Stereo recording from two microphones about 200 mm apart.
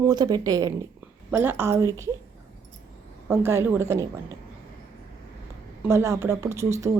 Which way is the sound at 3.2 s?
10° right (ahead or behind).